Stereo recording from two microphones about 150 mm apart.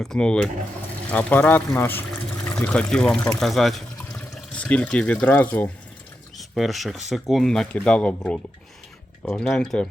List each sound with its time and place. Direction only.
0.0 s speech: 5° left (ahead or behind)
3.9 s water: 20° left (ahead or behind)
4.4 s speech: 10° left (ahead or behind)
6.3 s speech: centre (ahead or behind)